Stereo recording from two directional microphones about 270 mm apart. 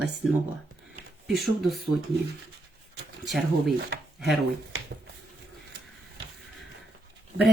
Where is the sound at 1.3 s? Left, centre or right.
Centre.